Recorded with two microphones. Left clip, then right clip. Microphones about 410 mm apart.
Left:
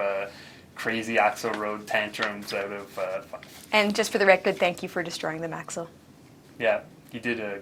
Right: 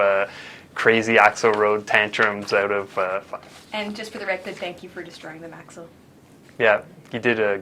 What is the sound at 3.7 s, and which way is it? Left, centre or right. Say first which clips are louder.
A woman's voice: left 7 dB; left.